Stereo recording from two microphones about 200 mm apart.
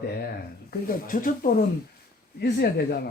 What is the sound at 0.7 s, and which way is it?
Speech, 45° left (ahead or behind).